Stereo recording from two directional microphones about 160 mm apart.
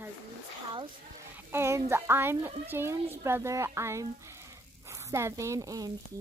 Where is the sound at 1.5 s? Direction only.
15° right (ahead or behind).